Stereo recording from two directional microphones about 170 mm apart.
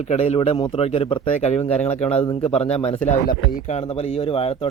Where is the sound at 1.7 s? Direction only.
5° left (ahead or behind).